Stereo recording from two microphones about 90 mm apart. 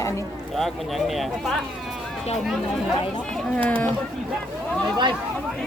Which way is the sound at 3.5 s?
15° left (ahead or behind).